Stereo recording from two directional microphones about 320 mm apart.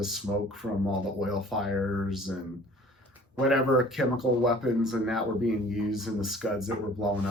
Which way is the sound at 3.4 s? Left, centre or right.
Centre.